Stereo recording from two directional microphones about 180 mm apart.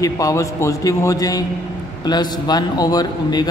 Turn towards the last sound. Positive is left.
turn(degrees=20)  # may be behind; listen again after turning